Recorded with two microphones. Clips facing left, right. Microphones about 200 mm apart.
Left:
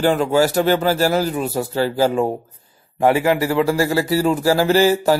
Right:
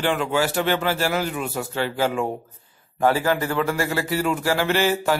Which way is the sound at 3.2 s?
10° left (ahead or behind).